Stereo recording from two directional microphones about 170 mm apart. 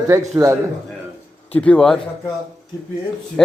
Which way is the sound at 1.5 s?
5° left (ahead or behind).